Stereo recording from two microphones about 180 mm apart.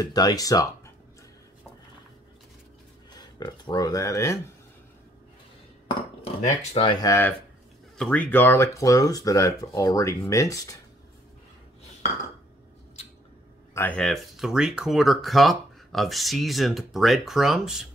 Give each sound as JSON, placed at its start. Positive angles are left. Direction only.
{"t": 0.0, "sound": "speech", "side_deg": 20}
{"t": 3.1, "sound": "speech", "side_deg": 20}
{"t": 6.4, "sound": "speech", "side_deg": 40}
{"t": 13.7, "sound": "speech", "side_deg": 5}